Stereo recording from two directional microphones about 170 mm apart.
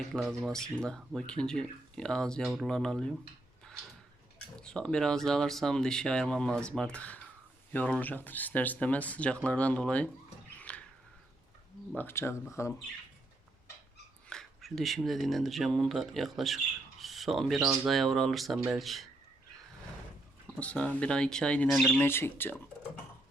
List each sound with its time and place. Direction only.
0.3 s speech: centre (ahead or behind)
4.6 s speech: 5° left (ahead or behind)
10.6 s a sound: 10° left (ahead or behind)
11.9 s speech: 15° left (ahead or behind)
14.3 s speech: centre (ahead or behind)
20.6 s speech: 5° left (ahead or behind)
22.0 s speech: 15° left (ahead or behind)